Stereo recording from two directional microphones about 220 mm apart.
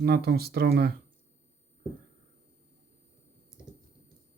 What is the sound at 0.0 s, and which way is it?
Speech, 45° right (ahead or behind).